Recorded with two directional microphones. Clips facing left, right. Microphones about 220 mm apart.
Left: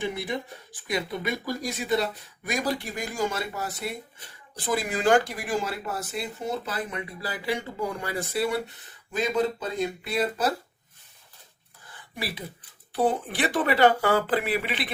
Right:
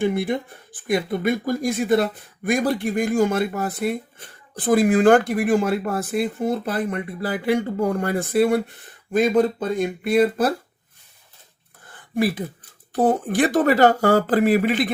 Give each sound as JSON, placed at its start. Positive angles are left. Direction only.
{"t": 0.0, "sound": "speech", "side_deg": -55}
{"t": 11.9, "sound": "a sound", "side_deg": -50}
{"t": 12.9, "sound": "speech", "side_deg": -45}